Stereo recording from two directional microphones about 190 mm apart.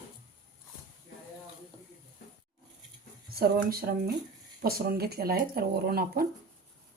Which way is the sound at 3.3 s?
50° right (ahead or behind).